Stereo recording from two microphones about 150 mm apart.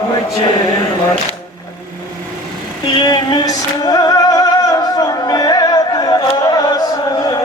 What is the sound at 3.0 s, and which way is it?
Music, 30° left (ahead or behind).